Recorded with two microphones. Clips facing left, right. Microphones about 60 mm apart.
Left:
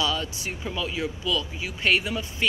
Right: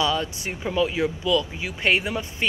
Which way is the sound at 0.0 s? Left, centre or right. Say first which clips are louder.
Right 3 dB; right.